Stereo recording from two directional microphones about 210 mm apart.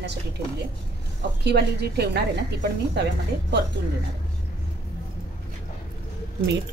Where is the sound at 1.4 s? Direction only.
50° right (ahead or behind).